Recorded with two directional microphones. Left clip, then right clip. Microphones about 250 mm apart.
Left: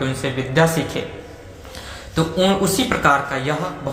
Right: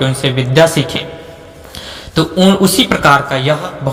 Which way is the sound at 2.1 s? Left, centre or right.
Right.